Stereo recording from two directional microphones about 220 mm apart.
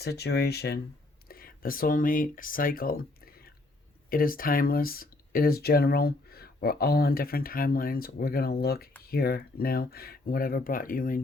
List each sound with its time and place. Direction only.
0.0 s speech: 50° left (ahead or behind)